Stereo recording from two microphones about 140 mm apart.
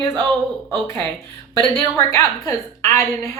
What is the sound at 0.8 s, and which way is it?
A woman's voice, 10° left (ahead or behind).